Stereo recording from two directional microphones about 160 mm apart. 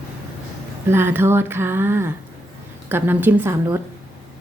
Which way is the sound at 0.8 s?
15° right (ahead or behind).